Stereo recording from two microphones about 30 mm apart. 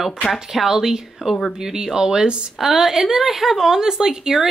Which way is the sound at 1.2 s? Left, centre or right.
Right.